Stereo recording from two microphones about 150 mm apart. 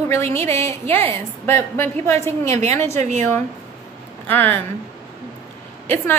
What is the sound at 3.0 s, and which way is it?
Speech, 50° right (ahead or behind).